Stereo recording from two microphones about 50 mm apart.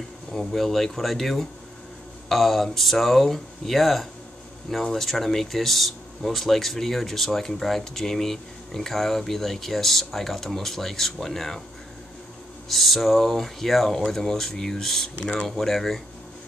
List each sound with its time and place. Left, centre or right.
0.3 s speech: centre
12.6 s speech: centre